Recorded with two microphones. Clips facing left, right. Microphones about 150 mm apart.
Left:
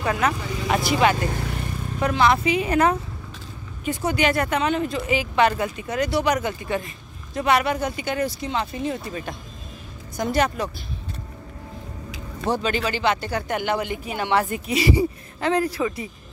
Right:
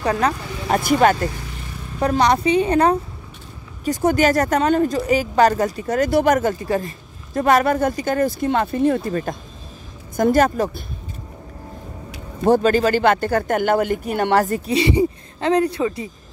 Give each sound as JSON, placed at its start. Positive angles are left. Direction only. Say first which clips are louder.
{"t": 0.0, "sound": "speech", "louder": "right 3 dB", "side_deg": -35}
{"t": 0.7, "sound": "speech", "louder": "right 5 dB", "side_deg": -50}
{"t": 2.0, "sound": "speech", "louder": "right 3 dB", "side_deg": -35}
{"t": 3.8, "sound": "speech", "louder": "right 5 dB", "side_deg": -45}
{"t": 12.4, "sound": "speech", "louder": "right 9 dB", "side_deg": -45}